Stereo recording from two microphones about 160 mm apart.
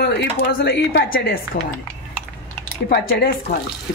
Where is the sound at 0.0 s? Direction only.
85° left.